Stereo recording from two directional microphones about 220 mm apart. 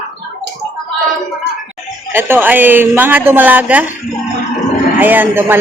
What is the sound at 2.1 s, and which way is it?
A woman's voice, 10° right (ahead or behind).